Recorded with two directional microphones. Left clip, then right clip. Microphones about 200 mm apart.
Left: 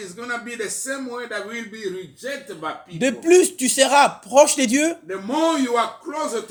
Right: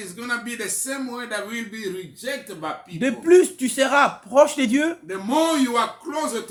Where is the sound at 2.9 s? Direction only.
25° left (ahead or behind).